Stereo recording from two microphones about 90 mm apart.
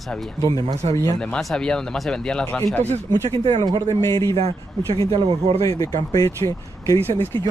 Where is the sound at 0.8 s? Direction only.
90° right.